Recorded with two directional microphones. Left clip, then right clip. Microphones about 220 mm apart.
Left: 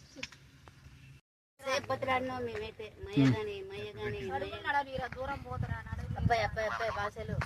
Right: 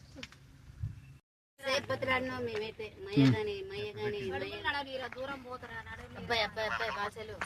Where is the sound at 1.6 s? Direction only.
50° right (ahead or behind).